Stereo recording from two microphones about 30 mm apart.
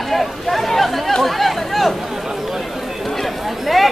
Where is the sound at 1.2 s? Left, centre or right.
Centre.